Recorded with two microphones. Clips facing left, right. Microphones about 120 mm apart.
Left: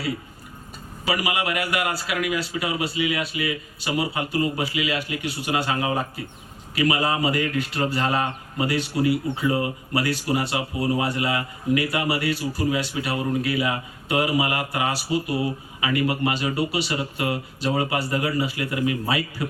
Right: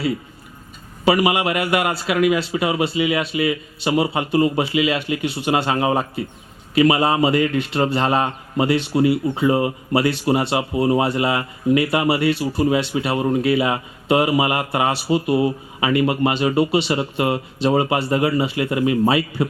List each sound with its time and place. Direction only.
1.0 s a man's voice: 25° right (ahead or behind)